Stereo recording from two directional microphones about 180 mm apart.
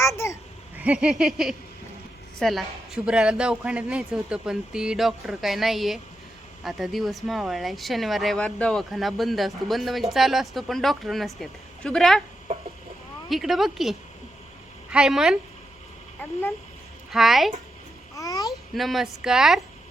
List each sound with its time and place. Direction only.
0.0 s a sound: 15° left (ahead or behind)
0.8 s speech: 5° right (ahead or behind)
13.3 s a woman's voice: centre (ahead or behind)
17.1 s speech: centre (ahead or behind)
18.1 s babbling: 20° left (ahead or behind)
18.4 s speech: centre (ahead or behind)